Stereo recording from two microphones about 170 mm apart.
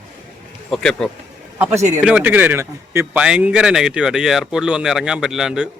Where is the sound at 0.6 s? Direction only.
5° left (ahead or behind).